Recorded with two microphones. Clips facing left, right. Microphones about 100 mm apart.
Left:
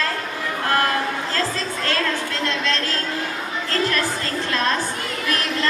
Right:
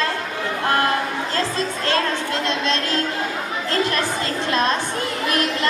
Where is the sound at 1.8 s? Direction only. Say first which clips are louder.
Right 1 dB; 20° right (ahead or behind).